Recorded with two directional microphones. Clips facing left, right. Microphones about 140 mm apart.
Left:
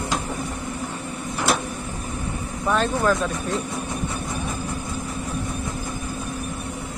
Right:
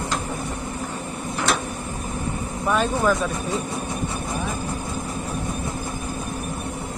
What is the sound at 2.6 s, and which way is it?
Vehicle, 10° right (ahead or behind).